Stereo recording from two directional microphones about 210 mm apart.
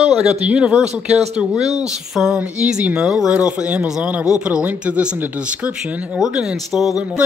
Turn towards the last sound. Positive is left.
turn(degrees=-5)  # may be behind; listen again after turning